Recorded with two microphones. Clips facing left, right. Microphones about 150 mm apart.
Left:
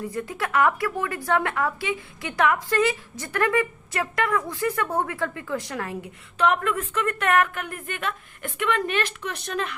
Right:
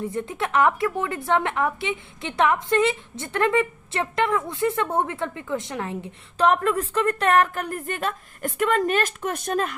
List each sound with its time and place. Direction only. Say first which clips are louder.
0.1 s a woman's voice: right 2 dB; 25° right (ahead or behind); by 9.7 s 45° right (ahead or behind)